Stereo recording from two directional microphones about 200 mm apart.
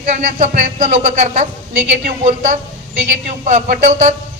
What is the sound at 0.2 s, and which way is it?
A man's voice, 35° right (ahead or behind).